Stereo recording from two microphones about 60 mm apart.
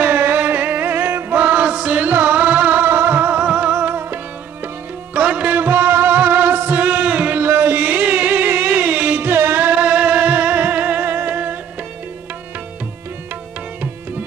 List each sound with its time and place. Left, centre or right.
0.0 s music: right
7.4 s music: right
9.3 s music: right